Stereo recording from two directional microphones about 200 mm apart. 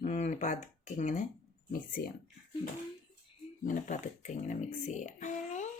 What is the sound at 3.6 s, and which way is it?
Speech, 40° left (ahead or behind).